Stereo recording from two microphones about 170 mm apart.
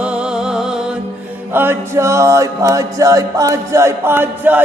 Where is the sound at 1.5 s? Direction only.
15° right (ahead or behind).